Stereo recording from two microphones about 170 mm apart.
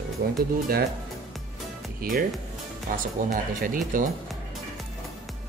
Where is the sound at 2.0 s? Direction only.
60° right (ahead or behind).